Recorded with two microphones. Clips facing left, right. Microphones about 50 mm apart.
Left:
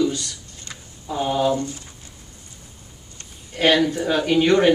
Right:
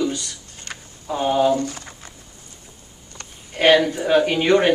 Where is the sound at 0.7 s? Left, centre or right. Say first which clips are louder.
Right 4 dB; right.